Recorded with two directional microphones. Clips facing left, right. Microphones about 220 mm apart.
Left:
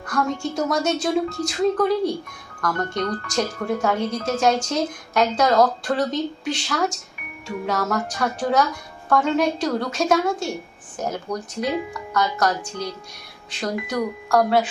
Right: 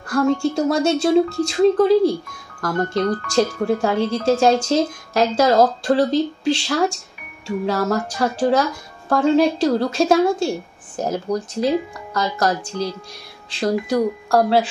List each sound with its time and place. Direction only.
0.0 s speech: 30° right (ahead or behind)